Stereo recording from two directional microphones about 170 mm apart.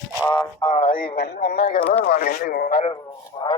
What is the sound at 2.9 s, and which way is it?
Speech, 20° left (ahead or behind).